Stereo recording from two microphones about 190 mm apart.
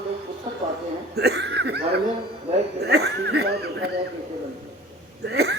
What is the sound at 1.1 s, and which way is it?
Speech, 60° right (ahead or behind).